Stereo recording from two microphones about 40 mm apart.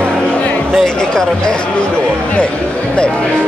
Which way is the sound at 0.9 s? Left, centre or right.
Centre.